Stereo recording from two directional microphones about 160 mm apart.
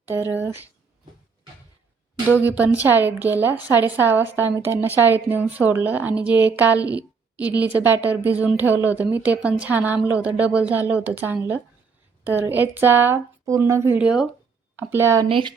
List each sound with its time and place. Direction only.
0.1 s a woman's voice: 15° right (ahead or behind)
2.3 s a woman's voice: 10° right (ahead or behind)
15.3 s speech: 30° right (ahead or behind)